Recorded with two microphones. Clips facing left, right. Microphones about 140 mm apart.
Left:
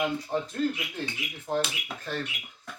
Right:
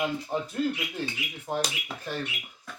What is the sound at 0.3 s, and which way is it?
Speech, 15° right (ahead or behind).